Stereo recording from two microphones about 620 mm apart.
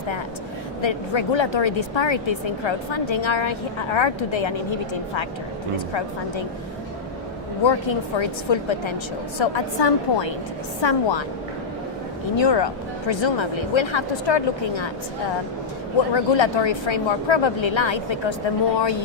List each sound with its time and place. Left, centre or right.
0.8 s a woman's voice: left
5.7 s a woman's voice: left
7.6 s a woman's voice: left
12.4 s a woman's voice: left
16.1 s a woman's voice: left